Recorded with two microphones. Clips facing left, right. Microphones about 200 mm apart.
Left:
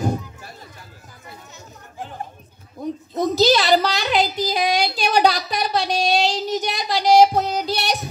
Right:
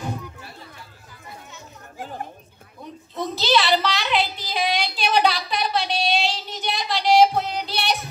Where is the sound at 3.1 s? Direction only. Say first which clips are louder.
Left 5 dB; 40° left (ahead or behind).